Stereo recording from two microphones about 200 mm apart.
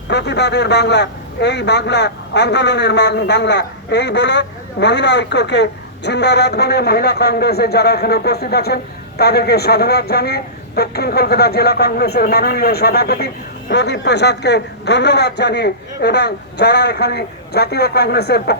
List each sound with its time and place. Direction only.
0.1 s a man's voice: 55° left (ahead or behind)